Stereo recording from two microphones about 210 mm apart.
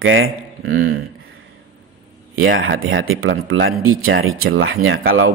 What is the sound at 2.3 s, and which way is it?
Speech, 70° right (ahead or behind).